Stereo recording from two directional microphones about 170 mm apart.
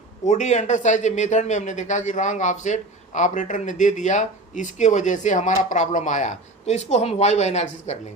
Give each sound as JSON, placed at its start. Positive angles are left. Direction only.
{"t": 0.3, "sound": "speech", "side_deg": 45}